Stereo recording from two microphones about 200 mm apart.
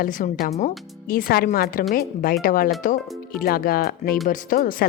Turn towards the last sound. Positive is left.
turn(degrees=45)  # may be behind; listen again after turning